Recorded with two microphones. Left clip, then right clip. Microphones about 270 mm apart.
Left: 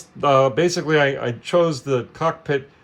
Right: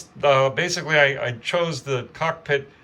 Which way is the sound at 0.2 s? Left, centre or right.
Centre.